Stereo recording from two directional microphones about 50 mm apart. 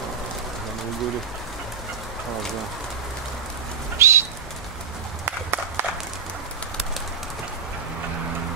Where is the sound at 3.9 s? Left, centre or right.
Right.